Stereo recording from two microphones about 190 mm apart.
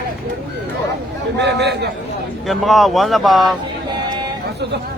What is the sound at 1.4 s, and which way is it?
Speech, 65° right (ahead or behind).